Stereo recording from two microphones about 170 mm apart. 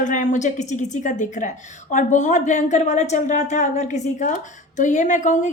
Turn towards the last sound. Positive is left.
turn(degrees=45)  # may be behind; listen again after turning